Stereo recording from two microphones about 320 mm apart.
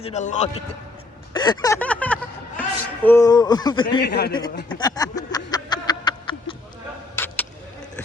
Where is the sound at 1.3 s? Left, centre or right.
Centre.